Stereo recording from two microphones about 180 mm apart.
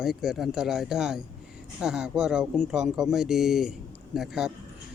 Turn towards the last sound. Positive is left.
turn(degrees=0)  # may be behind; listen again after turning